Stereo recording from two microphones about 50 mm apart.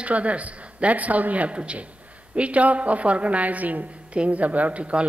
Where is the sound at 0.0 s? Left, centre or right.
Right.